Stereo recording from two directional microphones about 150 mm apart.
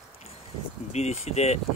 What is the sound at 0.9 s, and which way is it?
Speech, 45° left (ahead or behind).